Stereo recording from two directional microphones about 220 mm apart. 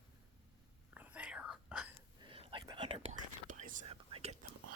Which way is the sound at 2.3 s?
20° right (ahead or behind).